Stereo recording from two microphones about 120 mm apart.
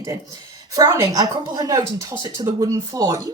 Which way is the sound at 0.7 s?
30° right (ahead or behind).